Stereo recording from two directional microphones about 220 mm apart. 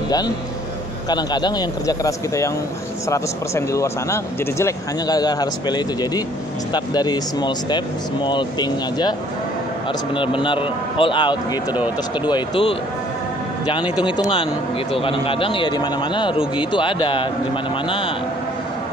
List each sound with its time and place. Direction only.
1.0 s a man's voice: 20° left (ahead or behind)
10.1 s a man's voice: 20° left (ahead or behind)
14.0 s a man's voice: 20° left (ahead or behind)